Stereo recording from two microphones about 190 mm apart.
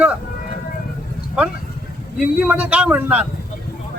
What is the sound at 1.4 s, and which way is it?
A man's voice, 5° right (ahead or behind).